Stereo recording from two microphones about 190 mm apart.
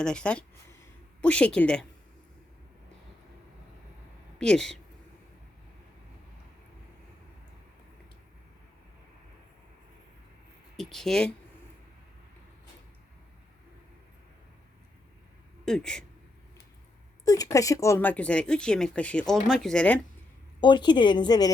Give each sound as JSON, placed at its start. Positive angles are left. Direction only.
{"t": 0.0, "sound": "speech", "side_deg": 5}
{"t": 4.4, "sound": "speech", "side_deg": 5}
{"t": 10.8, "sound": "speech", "side_deg": 0}
{"t": 15.6, "sound": "speech", "side_deg": 5}
{"t": 17.2, "sound": "speech", "side_deg": 20}
{"t": 20.6, "sound": "speech", "side_deg": 25}